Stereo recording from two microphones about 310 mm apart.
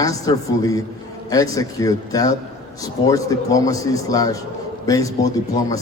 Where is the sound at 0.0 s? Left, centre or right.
Centre.